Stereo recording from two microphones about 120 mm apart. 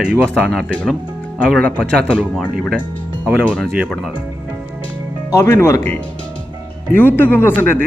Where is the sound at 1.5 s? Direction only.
10° left (ahead or behind).